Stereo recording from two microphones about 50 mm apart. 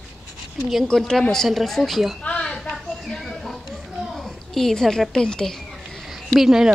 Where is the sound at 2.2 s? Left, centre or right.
Left.